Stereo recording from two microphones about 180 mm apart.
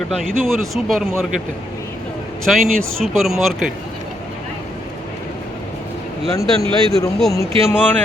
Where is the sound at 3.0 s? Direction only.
Centre (ahead or behind).